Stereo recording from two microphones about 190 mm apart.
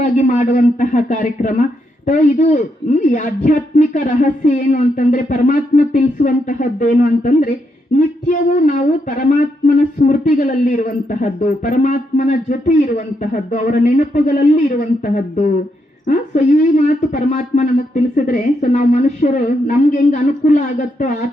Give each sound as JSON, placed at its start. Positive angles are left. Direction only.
{"t": 0.0, "sound": "a man's voice", "side_deg": 40}
{"t": 7.9, "sound": "a sound", "side_deg": 45}
{"t": 13.5, "sound": "a man's voice", "side_deg": 45}